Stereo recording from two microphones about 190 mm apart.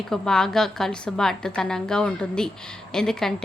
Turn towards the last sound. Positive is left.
turn(degrees=5)  # may be behind; listen again after turning